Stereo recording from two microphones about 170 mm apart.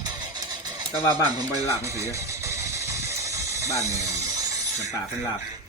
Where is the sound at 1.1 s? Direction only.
25° right (ahead or behind).